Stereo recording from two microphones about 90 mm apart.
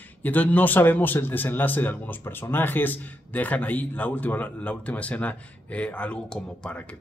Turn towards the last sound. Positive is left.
turn(degrees=15)  # may be behind; listen again after turning